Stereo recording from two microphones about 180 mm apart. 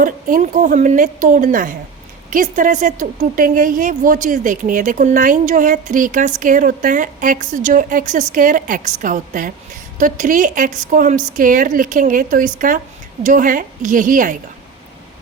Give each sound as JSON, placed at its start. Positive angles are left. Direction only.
{"t": 0.0, "sound": "a woman's voice", "side_deg": -50}